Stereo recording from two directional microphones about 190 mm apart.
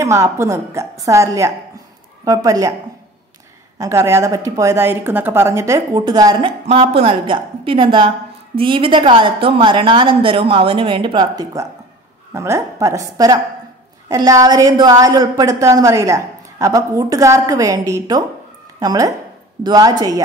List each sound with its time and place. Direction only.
0.0 s a woman's voice: 15° right (ahead or behind)
3.7 s a woman's voice: 15° right (ahead or behind)